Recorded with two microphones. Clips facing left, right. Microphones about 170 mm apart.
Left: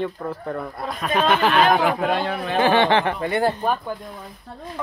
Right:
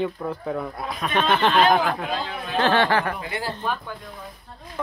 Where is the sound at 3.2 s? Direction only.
55° left (ahead or behind).